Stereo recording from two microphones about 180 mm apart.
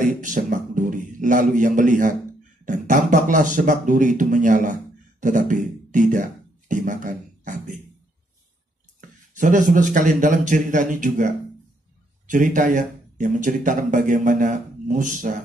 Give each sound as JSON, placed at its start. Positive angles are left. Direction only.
{"t": 0.0, "sound": "music", "side_deg": -45}
{"t": 2.6, "sound": "speech", "side_deg": -45}
{"t": 9.3, "sound": "speech", "side_deg": -45}